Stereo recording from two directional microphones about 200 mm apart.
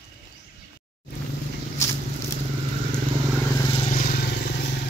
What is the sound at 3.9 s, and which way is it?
Vehicle, 45° left (ahead or behind).